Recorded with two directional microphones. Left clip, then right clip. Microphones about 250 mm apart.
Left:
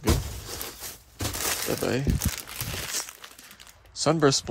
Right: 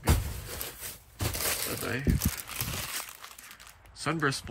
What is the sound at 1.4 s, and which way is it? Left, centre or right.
Speech, centre.